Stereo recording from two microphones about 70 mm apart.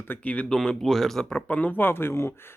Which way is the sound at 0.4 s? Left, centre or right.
Centre.